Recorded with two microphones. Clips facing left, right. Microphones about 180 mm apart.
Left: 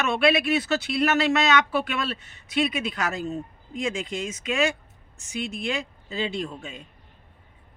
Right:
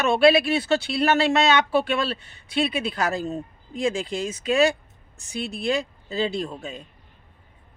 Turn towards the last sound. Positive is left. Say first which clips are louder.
# right 2 dB
turn(degrees=-35)  # may be behind; listen again after turning